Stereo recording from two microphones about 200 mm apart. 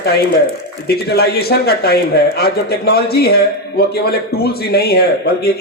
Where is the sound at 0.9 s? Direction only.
50° left (ahead or behind).